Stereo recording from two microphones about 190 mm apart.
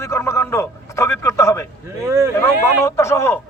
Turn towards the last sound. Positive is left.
turn(degrees=15)  # may be behind; listen again after turning